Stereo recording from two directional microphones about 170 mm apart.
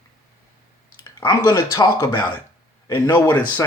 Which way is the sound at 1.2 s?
15° left (ahead or behind).